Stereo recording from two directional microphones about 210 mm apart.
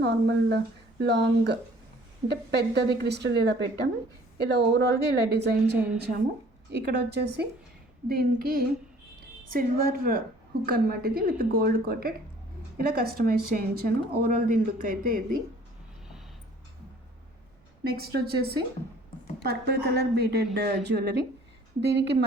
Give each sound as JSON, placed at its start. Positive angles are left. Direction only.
{"t": 0.0, "sound": "speech", "side_deg": -55}
{"t": 17.8, "sound": "speech", "side_deg": -45}